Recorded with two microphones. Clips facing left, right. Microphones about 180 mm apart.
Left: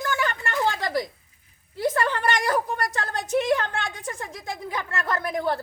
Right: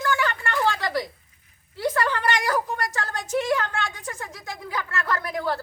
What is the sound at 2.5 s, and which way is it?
A woman's voice, 20° left (ahead or behind).